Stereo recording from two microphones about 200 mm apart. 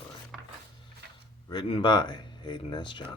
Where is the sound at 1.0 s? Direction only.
55° right (ahead or behind).